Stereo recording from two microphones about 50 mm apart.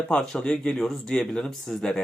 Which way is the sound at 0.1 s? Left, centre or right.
Centre.